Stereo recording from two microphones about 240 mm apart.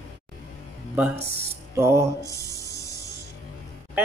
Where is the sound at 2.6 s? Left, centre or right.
Left.